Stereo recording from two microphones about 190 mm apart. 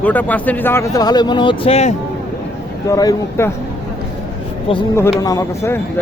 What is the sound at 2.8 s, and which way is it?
Speech, 20° left (ahead or behind).